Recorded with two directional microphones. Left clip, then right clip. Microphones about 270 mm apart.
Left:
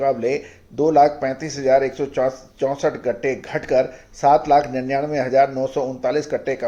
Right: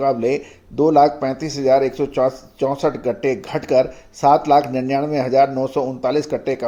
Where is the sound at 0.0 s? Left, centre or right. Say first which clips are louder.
Right 2 dB; right.